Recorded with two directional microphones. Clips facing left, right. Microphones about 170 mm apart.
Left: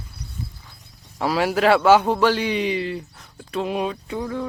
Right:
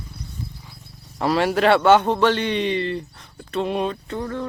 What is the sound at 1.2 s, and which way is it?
A man's voice, 5° left (ahead or behind).